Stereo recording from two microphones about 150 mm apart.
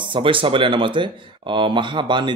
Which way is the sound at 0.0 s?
35° right (ahead or behind).